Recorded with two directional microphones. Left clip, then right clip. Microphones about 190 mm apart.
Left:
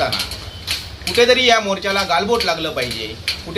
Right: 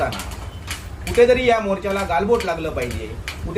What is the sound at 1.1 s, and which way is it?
Speech, 5° right (ahead or behind).